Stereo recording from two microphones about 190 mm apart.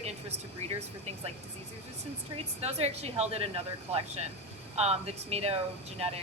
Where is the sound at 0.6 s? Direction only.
35° right (ahead or behind).